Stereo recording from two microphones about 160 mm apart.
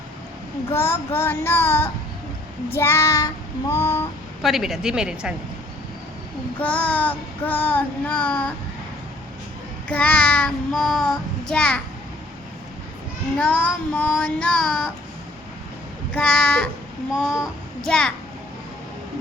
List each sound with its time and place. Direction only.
0.7 s child singing: 15° left (ahead or behind)
4.4 s child singing: centre (ahead or behind)
6.6 s child singing: 10° left (ahead or behind)
9.9 s child singing: 10° left (ahead or behind)
13.3 s child singing: 5° left (ahead or behind)
16.1 s child singing: 5° left (ahead or behind)